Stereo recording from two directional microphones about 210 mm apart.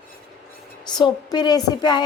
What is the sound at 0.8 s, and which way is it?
A woman's voice, 20° left (ahead or behind).